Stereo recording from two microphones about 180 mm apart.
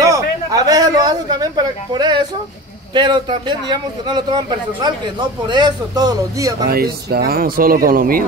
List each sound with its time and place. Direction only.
0.0 s a sound: 20° right (ahead or behind)
2.9 s a man's voice: 25° right (ahead or behind)
6.7 s speech: 60° right (ahead or behind)